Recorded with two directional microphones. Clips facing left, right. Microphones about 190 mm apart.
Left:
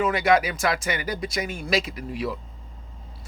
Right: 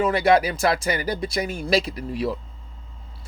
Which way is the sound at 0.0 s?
35° right (ahead or behind).